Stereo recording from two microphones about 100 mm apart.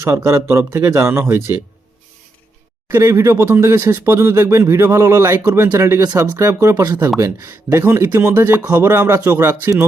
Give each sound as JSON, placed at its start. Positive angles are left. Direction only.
{"t": 0.0, "sound": "speech", "side_deg": -25}
{"t": 2.9, "sound": "speech", "side_deg": -25}